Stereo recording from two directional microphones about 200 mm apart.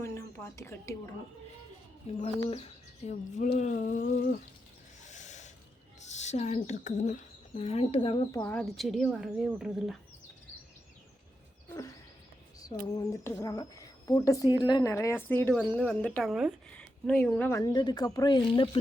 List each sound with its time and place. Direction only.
0.0 s speech: 15° left (ahead or behind)
3.1 s speech: 35° left (ahead or behind)
3.6 s a sound: 40° left (ahead or behind)
5.0 s owl: 35° left (ahead or behind)
6.1 s a woman's voice: 35° left (ahead or behind)
8.3 s speech: 10° left (ahead or behind)
12.5 s a woman's voice: 20° left (ahead or behind)